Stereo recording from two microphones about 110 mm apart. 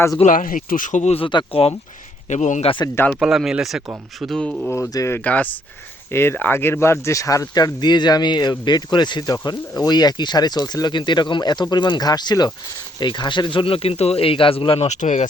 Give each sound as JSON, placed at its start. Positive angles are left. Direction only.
{"t": 0.2, "sound": "speech", "side_deg": 65}
{"t": 0.9, "sound": "speech", "side_deg": 90}
{"t": 1.2, "sound": "speech", "side_deg": 50}
{"t": 2.3, "sound": "speech", "side_deg": 90}
{"t": 2.9, "sound": "speech", "side_deg": 15}
{"t": 3.2, "sound": "speech", "side_deg": -5}
{"t": 4.7, "sound": "speech", "side_deg": 25}
{"t": 5.2, "sound": "speech", "side_deg": 15}
{"t": 14.8, "sound": "speech", "side_deg": 90}